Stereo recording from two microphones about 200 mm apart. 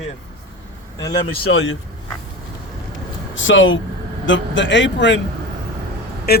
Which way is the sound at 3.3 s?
70° left (ahead or behind).